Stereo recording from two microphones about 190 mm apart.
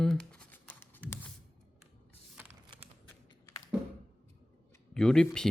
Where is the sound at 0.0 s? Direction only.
5° left (ahead or behind).